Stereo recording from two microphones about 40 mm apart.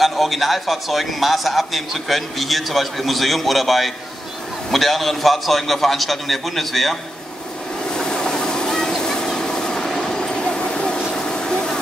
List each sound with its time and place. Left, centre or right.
0.0 s a man's voice: centre
7.9 s vehicle: centre